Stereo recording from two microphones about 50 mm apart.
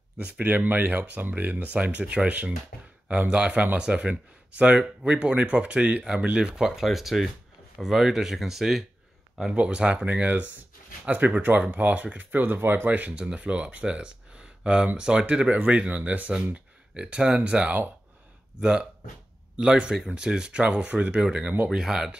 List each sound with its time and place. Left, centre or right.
0.5 s speech: right; by 8.8 s centre
9.5 s speech: right
10.0 s speech: right
13.1 s speech: centre
21.6 s speech: centre